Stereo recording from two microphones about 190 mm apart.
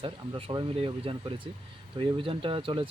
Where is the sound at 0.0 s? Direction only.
30° right (ahead or behind).